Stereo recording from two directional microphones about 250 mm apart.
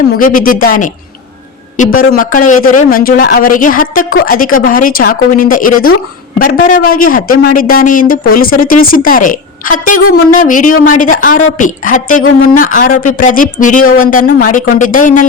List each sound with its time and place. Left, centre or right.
0.2 s speech: left